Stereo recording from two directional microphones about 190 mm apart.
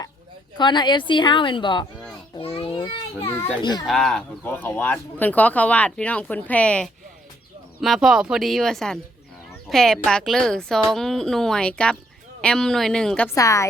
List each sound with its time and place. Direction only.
0.5 s a woman's voice: 25° left (ahead or behind)
2.3 s a sound: 25° left (ahead or behind)
3.6 s a woman's voice: 20° left (ahead or behind)
3.8 s speech: centre (ahead or behind)
13.3 s speech: 15° left (ahead or behind)